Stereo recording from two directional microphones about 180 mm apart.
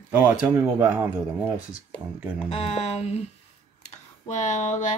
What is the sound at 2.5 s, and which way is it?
Speech, 35° left (ahead or behind).